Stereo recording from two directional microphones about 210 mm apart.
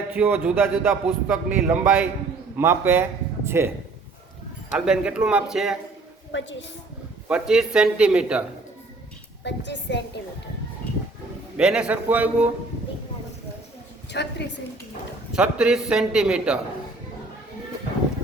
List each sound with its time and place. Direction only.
0.1 s a man's voice: 5° right (ahead or behind)
4.7 s a man's voice: 5° right (ahead or behind)
6.3 s a woman's voice: 60° left (ahead or behind)
7.3 s a man's voice: 5° right (ahead or behind)
9.4 s a woman's voice: 55° left (ahead or behind)
11.5 s a man's voice: 5° right (ahead or behind)
14.1 s a woman's voice: 55° left (ahead or behind)
15.3 s a man's voice: 5° right (ahead or behind)